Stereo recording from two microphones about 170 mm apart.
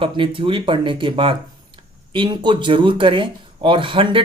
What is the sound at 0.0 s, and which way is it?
Speech, 30° right (ahead or behind).